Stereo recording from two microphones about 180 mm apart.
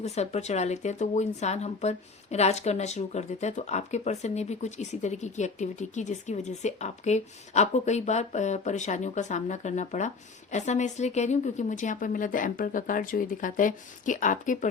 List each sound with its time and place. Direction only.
0.0 s a woman's voice: 35° left (ahead or behind)